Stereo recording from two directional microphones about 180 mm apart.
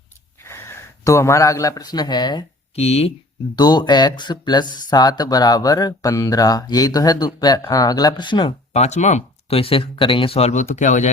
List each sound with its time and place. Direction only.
0.4 s speech: 15° left (ahead or behind)
2.7 s speech: 35° left (ahead or behind)
3.5 s speech: 25° left (ahead or behind); by 11.1 s 45° left (ahead or behind)